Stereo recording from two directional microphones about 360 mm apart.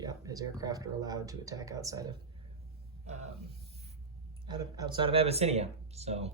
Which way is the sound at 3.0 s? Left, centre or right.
Centre.